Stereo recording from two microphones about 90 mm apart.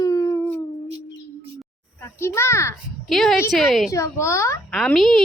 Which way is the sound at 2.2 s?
30° left (ahead or behind).